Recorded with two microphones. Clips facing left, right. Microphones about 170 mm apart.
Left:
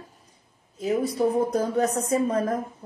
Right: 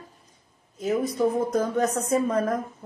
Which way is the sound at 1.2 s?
35° left (ahead or behind).